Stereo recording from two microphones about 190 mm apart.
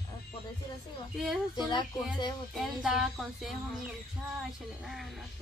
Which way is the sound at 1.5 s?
20° left (ahead or behind).